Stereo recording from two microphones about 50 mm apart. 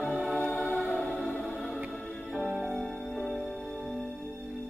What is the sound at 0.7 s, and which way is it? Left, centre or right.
Music, right.